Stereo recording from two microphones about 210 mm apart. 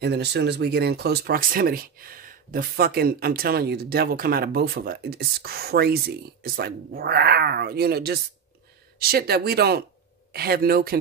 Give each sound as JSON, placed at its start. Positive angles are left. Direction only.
{"t": 0.0, "sound": "speech", "side_deg": -55}